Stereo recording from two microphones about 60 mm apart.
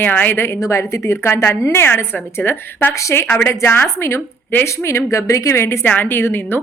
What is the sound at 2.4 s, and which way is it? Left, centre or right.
Speech, centre.